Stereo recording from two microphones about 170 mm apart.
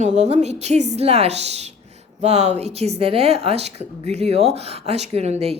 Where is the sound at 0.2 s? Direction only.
40° right (ahead or behind).